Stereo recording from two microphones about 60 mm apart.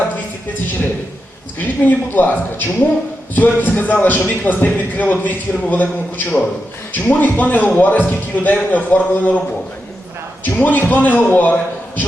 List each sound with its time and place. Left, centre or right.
1.5 s a man's voice: left
10.4 s a man's voice: left